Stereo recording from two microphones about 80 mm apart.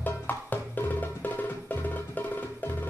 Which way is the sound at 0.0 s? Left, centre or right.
Left.